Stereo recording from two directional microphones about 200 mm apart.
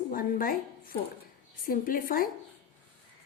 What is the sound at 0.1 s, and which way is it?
A woman's voice, 45° left (ahead or behind).